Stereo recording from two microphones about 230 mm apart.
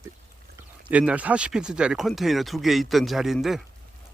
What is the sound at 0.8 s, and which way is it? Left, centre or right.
Speech, centre.